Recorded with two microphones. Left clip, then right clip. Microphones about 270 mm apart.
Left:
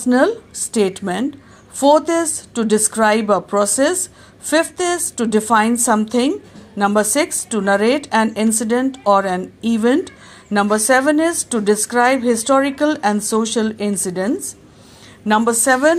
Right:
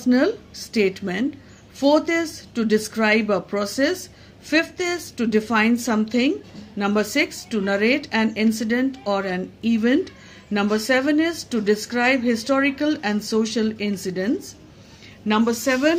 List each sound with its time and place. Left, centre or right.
0.0 s a woman's voice: centre